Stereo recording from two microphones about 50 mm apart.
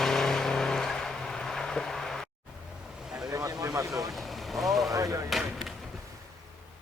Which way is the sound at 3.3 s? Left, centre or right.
Right.